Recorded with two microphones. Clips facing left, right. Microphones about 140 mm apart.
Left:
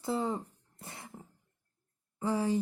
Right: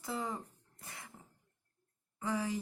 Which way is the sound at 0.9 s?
25° left (ahead or behind).